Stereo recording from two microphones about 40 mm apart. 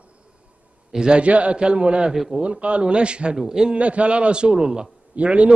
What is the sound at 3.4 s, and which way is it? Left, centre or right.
Speech, centre.